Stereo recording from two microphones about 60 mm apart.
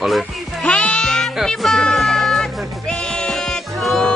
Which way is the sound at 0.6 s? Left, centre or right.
Centre.